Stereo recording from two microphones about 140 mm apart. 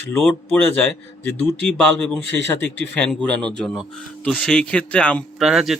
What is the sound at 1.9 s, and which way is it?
A man's voice, 10° left (ahead or behind).